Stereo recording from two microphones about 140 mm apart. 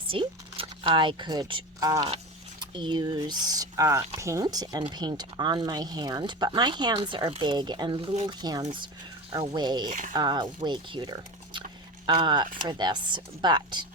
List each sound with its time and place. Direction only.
0.1 s speech: 40° right (ahead or behind)
2.0 s speech: 40° right (ahead or behind)